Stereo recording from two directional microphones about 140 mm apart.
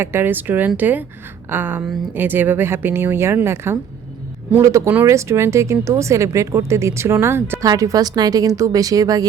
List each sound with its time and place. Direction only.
0.0 s speech: 15° right (ahead or behind)